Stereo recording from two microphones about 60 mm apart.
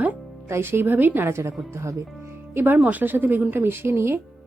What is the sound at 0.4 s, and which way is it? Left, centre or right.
Speech, right.